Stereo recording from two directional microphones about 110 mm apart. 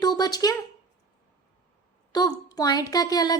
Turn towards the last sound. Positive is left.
turn(degrees=35)  # may be behind; listen again after turning